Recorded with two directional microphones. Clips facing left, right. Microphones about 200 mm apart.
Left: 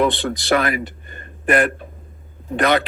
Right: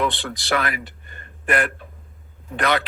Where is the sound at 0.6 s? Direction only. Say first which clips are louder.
Left 6 dB; 45° left (ahead or behind).